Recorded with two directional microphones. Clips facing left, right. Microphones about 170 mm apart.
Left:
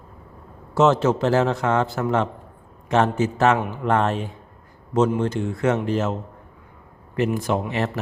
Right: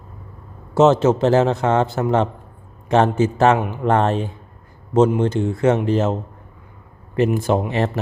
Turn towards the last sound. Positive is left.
turn(degrees=-30)  # may be behind; listen again after turning